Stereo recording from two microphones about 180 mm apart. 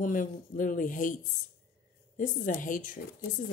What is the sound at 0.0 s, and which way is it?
A woman's voice, 45° left (ahead or behind).